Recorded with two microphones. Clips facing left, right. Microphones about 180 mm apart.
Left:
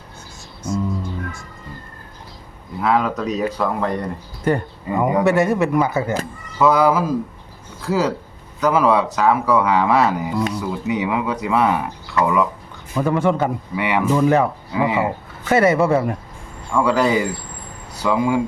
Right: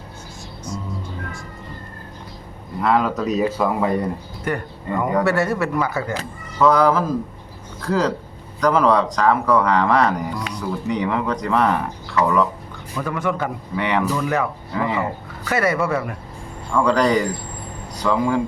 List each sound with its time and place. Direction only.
2.8 s speech: centre (ahead or behind)
4.5 s speech: 30° left (ahead or behind)
4.9 s speech: 10° left (ahead or behind)
6.6 s speech: 10° left (ahead or behind)
13.0 s speech: 30° left (ahead or behind)
13.7 s speech: 5° left (ahead or behind)
14.1 s speech: 30° left (ahead or behind)
14.7 s speech: 10° left (ahead or behind)
15.4 s speech: 25° left (ahead or behind)
16.7 s speech: 5° left (ahead or behind)